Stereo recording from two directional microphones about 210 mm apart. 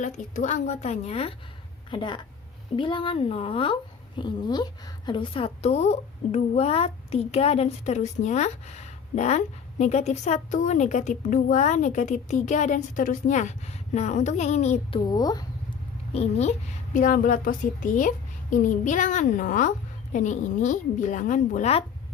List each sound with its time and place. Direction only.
0.0 s a woman's voice: 35° left (ahead or behind); by 15.4 s 20° left (ahead or behind)
16.1 s a woman's voice: 30° left (ahead or behind)